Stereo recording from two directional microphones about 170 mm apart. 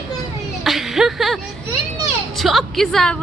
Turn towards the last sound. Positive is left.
turn(degrees=5)  # may be behind; listen again after turning